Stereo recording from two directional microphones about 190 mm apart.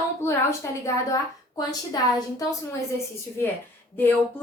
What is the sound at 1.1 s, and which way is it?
Speech, 20° left (ahead or behind).